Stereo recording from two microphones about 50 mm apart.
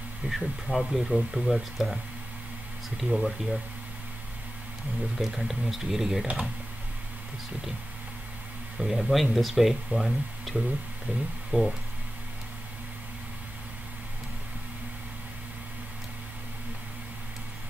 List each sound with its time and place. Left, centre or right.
0.3 s speech: centre
3.1 s speech: centre
5.1 s speech: centre
8.7 s speech: centre
11.1 s speech: right